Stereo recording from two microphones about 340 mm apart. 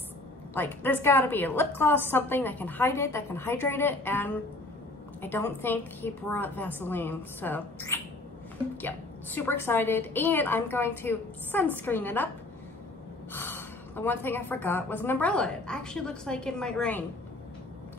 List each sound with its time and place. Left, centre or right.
0.6 s a woman's voice: centre
13.3 s a woman's voice: centre